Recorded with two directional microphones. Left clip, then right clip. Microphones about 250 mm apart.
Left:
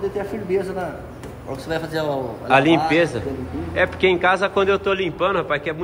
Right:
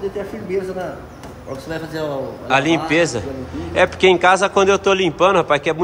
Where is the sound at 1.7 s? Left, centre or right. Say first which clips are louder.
Left 2 dB; centre.